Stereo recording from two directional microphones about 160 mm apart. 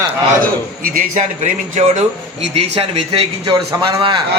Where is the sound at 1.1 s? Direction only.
50° right (ahead or behind).